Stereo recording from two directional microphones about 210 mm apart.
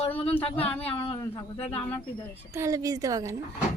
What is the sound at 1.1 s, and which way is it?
Speech, 10° left (ahead or behind).